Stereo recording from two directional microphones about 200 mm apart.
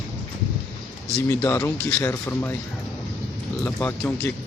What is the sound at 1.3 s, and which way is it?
Speech, 10° left (ahead or behind).